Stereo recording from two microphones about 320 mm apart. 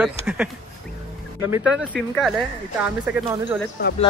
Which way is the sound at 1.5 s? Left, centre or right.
Centre.